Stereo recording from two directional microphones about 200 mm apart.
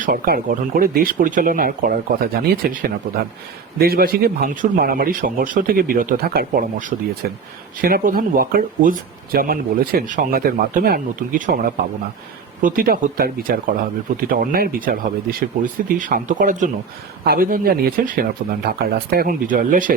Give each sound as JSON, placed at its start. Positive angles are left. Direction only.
{"t": 0.0, "sound": "speech", "side_deg": -45}